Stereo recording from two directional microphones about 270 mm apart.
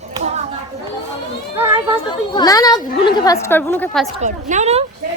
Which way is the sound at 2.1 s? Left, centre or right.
Centre.